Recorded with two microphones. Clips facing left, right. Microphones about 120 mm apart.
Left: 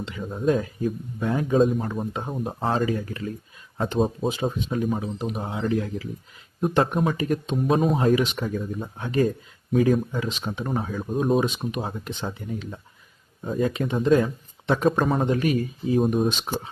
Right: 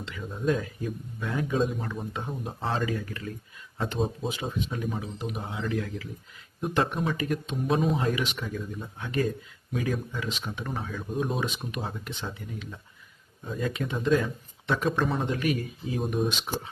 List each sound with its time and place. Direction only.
0.2 s speech: 35° left (ahead or behind)
11.4 s speech: 25° left (ahead or behind)
12.2 s speech: 40° left (ahead or behind)